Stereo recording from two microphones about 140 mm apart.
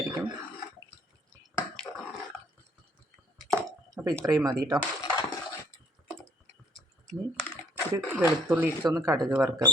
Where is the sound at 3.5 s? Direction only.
25° right (ahead or behind).